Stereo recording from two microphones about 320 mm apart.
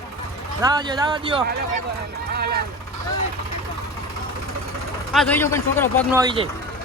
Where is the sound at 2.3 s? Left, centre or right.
Right.